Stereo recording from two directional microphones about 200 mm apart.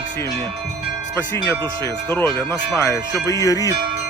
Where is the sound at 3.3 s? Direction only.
15° left (ahead or behind).